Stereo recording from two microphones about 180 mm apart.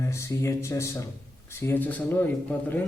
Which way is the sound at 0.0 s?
15° left (ahead or behind).